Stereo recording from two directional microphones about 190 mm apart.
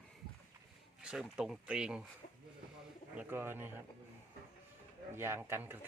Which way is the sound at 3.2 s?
10° right (ahead or behind).